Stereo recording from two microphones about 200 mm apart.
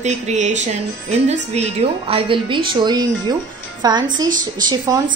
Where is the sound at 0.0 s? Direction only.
35° right (ahead or behind).